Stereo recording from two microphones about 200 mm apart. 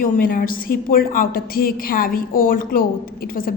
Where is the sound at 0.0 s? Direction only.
45° left (ahead or behind).